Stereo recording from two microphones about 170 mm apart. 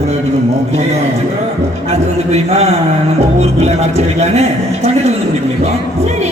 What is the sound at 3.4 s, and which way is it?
A man's voice, 40° right (ahead or behind).